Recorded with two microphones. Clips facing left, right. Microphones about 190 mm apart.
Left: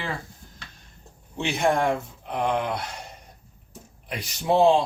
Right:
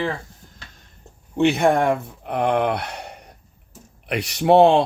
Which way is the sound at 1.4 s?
60° right (ahead or behind).